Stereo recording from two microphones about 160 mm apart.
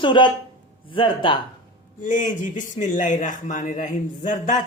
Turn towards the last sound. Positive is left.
turn(degrees=50)  # may be behind; listen again after turning